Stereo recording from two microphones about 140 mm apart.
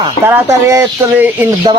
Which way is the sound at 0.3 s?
20° right (ahead or behind).